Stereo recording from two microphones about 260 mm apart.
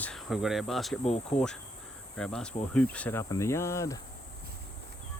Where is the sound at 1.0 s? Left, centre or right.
Left.